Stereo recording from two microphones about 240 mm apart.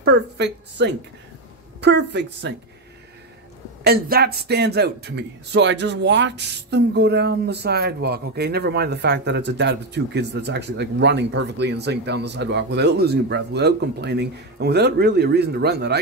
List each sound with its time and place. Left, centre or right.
0.0 s a woman's voice: right
3.8 s speech: right